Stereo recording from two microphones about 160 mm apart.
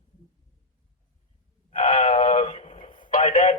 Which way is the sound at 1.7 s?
45° left (ahead or behind).